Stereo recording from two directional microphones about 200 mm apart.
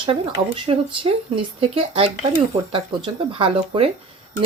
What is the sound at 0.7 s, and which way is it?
Speech, 25° right (ahead or behind).